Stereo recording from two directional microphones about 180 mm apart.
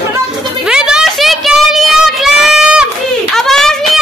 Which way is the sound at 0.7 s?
5° right (ahead or behind).